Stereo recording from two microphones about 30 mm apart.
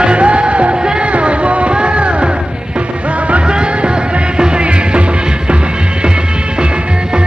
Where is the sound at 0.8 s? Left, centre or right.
Right.